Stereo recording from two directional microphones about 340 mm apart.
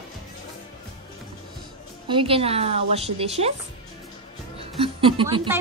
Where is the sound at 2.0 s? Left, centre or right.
Centre.